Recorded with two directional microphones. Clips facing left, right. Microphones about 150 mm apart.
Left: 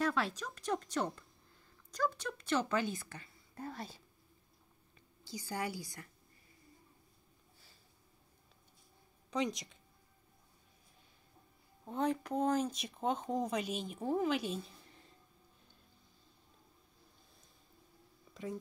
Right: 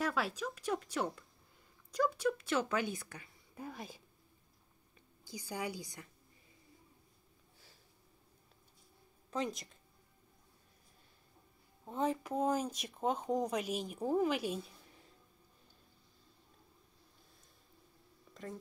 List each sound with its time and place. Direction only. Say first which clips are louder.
0.0 s speech: left 1 dB; 5° right (ahead or behind)
5.3 s a woman's voice: left 1 dB; 15° right (ahead or behind)
11.8 s speech: left 1 dB; 5° right (ahead or behind)
18.3 s a sound: left 4 dB; 5° left (ahead or behind)